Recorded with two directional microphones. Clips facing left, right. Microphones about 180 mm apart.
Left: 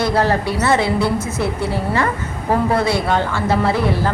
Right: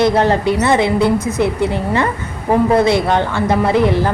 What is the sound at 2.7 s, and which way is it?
Speech, 20° right (ahead or behind).